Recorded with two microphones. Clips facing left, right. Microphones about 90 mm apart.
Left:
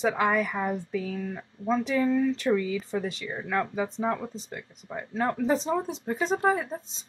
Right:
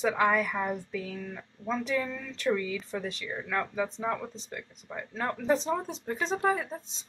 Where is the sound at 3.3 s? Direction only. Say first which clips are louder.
Left 3 dB; 15° left (ahead or behind).